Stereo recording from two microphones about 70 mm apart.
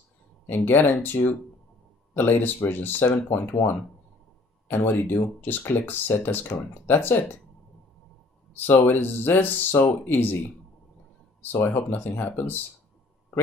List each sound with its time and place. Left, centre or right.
0.5 s speech: left
8.5 s speech: left
11.5 s speech: left